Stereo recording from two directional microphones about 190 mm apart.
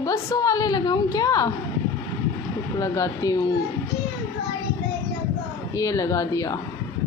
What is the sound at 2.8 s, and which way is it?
Speech, 15° left (ahead or behind).